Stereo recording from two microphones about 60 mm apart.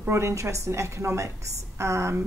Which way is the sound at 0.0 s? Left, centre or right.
Right.